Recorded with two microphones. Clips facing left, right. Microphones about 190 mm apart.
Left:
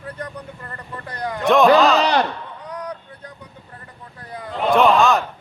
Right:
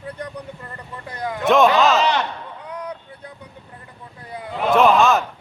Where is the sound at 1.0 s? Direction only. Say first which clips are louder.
Even; 5° right (ahead or behind).